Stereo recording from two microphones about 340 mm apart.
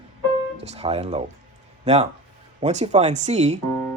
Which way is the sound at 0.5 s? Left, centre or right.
Centre.